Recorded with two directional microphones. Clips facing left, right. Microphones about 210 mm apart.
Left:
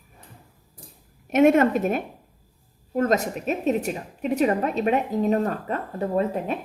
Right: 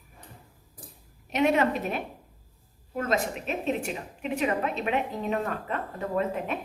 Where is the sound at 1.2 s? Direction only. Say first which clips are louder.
Left 7 dB; 50° left (ahead or behind).